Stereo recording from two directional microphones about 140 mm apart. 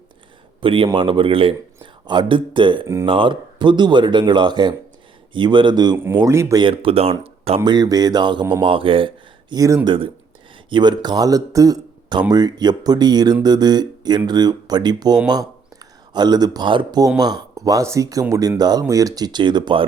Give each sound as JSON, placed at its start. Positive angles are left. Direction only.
{"t": 0.6, "sound": "speech", "side_deg": -40}
{"t": 2.8, "sound": "speech", "side_deg": -20}
{"t": 3.1, "sound": "speech", "side_deg": -35}
{"t": 6.6, "sound": "speech", "side_deg": -40}
{"t": 7.6, "sound": "speech", "side_deg": -30}
{"t": 9.6, "sound": "speech", "side_deg": -25}